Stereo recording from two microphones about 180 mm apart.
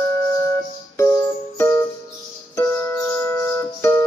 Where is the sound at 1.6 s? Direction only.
15° left (ahead or behind).